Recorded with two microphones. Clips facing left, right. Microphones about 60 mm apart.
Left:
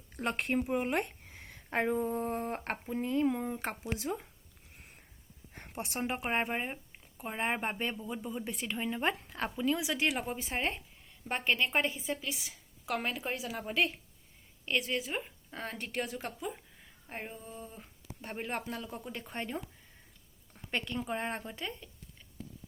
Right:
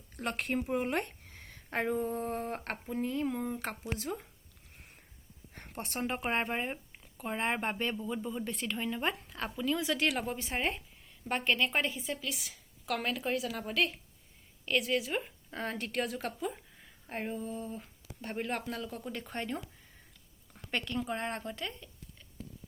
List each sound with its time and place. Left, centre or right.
0.2 s speech: left
0.9 s a sound: centre
2.0 s a woman's voice: centre
3.0 s speech: left
3.2 s a woman's voice: centre
5.5 s a woman's voice: centre
8.6 s a woman's voice: centre
9.0 s speech: left
9.8 s a woman's voice: centre
14.8 s a woman's voice: centre
20.7 s a woman's voice: centre